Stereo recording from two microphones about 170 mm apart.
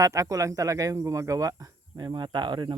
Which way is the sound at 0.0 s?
20° right (ahead or behind).